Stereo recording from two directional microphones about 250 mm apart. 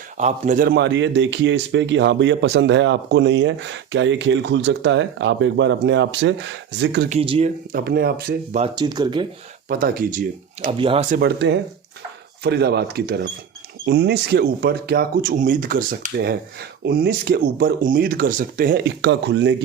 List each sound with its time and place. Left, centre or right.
0.2 s a man's voice: right
7.1 s speech: right
7.7 s speech: right
8.6 s speech: centre
9.6 s speech: right
11.2 s a man's voice: right